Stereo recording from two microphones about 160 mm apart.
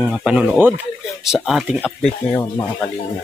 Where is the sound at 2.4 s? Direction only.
20° left (ahead or behind).